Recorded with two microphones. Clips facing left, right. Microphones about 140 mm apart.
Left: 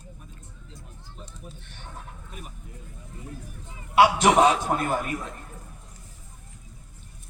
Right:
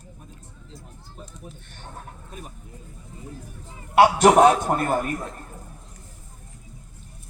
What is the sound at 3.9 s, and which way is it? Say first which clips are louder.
A man's voice: right 3 dB; 50° right (ahead or behind).